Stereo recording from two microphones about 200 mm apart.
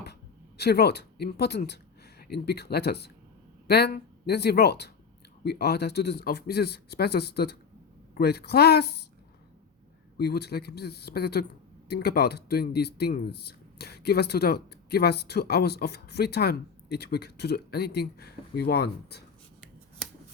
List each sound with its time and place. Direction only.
0.0 s speech: 55° left (ahead or behind)
10.2 s speech: 55° left (ahead or behind)